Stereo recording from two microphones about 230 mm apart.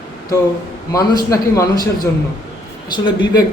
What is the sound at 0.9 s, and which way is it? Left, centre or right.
Speech, centre.